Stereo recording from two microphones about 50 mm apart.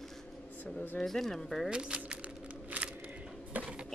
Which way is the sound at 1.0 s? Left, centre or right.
Centre.